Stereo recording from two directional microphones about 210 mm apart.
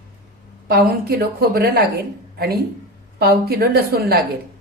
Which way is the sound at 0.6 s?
45° right (ahead or behind).